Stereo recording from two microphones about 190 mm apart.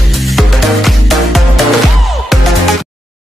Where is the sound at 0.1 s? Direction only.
Centre (ahead or behind).